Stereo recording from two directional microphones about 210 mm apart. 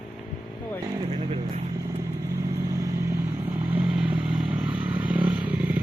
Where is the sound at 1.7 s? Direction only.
15° right (ahead or behind).